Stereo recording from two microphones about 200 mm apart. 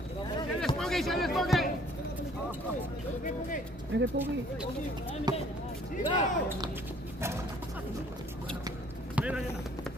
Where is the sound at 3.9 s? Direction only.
65° right (ahead or behind).